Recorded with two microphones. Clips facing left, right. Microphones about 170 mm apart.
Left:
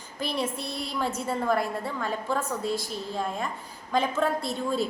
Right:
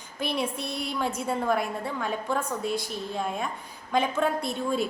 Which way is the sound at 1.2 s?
Centre (ahead or behind).